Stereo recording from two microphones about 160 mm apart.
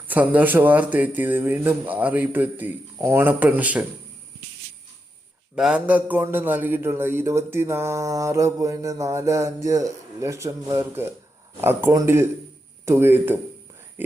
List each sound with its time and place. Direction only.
0.1 s a man's voice: 10° right (ahead or behind)
5.5 s a man's voice: 5° right (ahead or behind)